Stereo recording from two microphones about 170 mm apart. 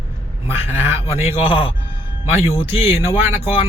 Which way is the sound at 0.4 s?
15° right (ahead or behind).